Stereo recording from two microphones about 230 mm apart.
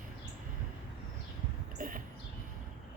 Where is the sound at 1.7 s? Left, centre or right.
Right.